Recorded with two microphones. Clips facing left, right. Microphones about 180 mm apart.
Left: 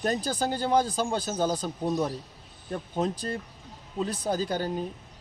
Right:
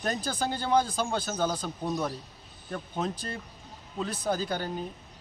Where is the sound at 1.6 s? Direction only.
40° left (ahead or behind).